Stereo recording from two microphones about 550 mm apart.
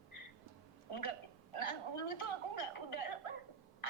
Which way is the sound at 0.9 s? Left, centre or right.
Left.